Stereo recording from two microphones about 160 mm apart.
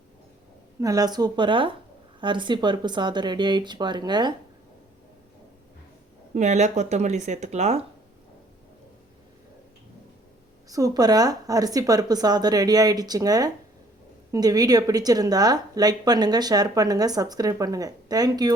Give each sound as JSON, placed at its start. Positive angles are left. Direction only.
{"t": 0.8, "sound": "speech", "side_deg": -20}
{"t": 6.3, "sound": "speech", "side_deg": -45}
{"t": 10.7, "sound": "speech", "side_deg": -20}